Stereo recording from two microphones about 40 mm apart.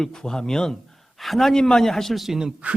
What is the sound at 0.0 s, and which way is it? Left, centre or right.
Speech, centre.